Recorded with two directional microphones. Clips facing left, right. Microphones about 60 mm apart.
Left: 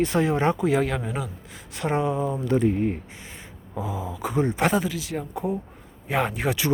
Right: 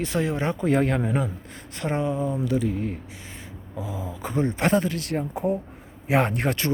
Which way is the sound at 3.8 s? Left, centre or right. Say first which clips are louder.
Left 3 dB; left.